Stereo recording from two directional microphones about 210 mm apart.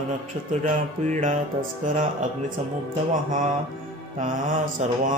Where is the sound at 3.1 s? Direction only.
35° right (ahead or behind).